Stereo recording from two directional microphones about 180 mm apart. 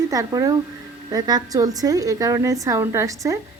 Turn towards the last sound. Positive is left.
turn(degrees=-20)  # may be behind; listen again after turning